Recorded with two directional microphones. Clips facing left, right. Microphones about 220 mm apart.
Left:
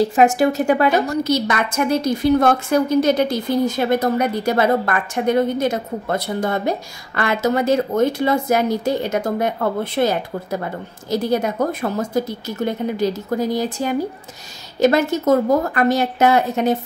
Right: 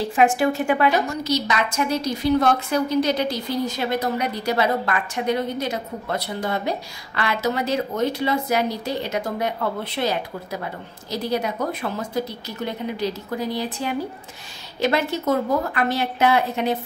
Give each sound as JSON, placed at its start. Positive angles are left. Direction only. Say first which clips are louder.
{"t": 0.0, "sound": "a woman's voice", "louder": "left 4 dB", "side_deg": 40}
{"t": 1.2, "sound": "a woman's voice", "louder": "left 4 dB", "side_deg": 55}